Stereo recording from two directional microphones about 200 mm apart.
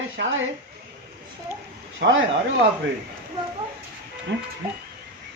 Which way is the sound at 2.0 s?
60° right (ahead or behind).